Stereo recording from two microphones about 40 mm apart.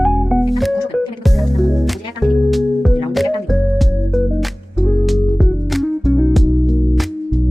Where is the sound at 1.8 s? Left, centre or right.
Centre.